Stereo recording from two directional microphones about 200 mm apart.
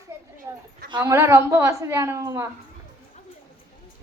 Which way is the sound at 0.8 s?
20° right (ahead or behind).